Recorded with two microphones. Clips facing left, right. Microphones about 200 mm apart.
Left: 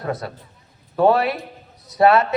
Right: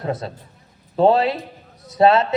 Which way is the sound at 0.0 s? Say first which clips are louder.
Right 1 dB; 25° right (ahead or behind).